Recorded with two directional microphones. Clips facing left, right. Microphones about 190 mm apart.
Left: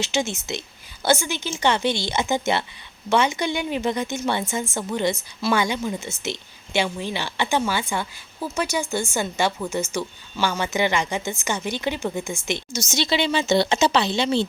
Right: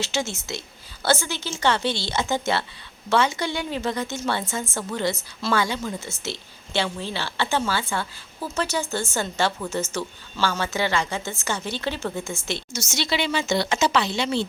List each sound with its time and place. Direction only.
0.0 s a woman's voice: 15° left (ahead or behind)